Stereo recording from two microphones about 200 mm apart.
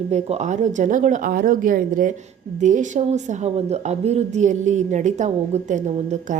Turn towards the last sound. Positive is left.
turn(degrees=-35)  # may be behind; listen again after turning